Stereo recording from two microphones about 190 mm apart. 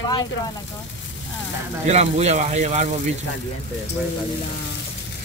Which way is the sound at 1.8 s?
35° right (ahead or behind).